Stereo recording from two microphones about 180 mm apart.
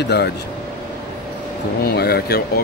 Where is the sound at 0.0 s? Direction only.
70° left (ahead or behind).